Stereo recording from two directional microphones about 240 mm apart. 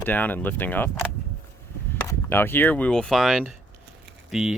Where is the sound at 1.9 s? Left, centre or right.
Centre.